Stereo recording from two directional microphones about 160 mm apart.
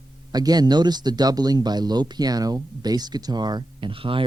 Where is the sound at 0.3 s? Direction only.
25° right (ahead or behind).